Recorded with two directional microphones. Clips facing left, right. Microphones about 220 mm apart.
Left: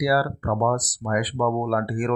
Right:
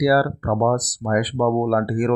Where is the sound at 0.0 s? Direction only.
40° right (ahead or behind).